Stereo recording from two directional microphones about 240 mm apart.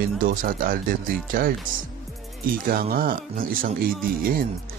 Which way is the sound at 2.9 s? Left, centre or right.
Right.